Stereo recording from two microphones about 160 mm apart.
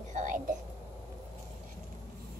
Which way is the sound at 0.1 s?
50° right (ahead or behind).